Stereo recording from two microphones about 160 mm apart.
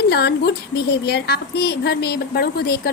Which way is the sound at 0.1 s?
90° left.